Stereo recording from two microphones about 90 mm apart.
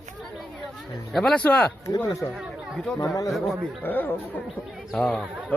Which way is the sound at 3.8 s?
20° left (ahead or behind).